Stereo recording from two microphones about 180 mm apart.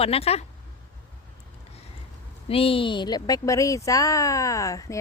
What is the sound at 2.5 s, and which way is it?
Speech, 30° left (ahead or behind).